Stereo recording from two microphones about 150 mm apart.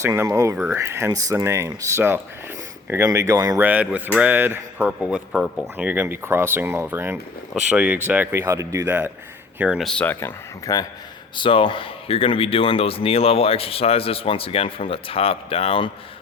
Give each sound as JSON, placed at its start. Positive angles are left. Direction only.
{"t": 0.0, "sound": "speech", "side_deg": -20}
{"t": 3.6, "sound": "speech", "side_deg": -10}
{"t": 9.6, "sound": "speech", "side_deg": -5}
{"t": 11.3, "sound": "speech", "side_deg": 35}